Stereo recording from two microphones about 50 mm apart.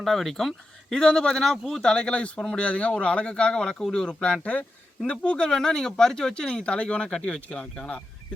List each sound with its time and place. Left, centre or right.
0.0 s speech: centre
1.9 s speech: centre
4.1 s speech: left